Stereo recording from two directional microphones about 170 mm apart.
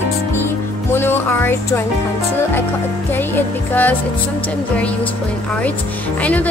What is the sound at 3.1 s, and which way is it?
Speech, 10° left (ahead or behind).